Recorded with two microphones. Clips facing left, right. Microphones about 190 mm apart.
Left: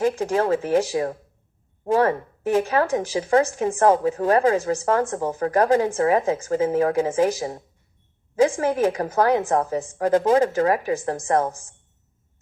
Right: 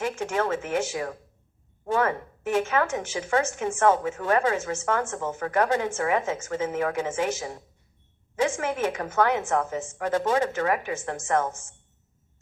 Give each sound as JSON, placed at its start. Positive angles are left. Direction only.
{"t": 0.0, "sound": "speech", "side_deg": 35}